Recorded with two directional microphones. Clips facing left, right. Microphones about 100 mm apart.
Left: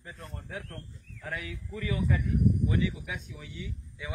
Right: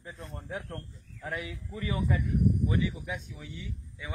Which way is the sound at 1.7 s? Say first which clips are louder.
Left 1 dB; 25° right (ahead or behind).